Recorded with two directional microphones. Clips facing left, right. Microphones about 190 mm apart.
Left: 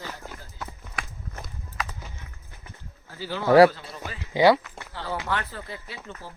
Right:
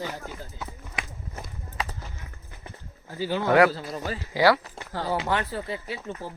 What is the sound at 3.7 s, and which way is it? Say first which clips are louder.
Speech: right 7 dB; 35° right (ahead or behind).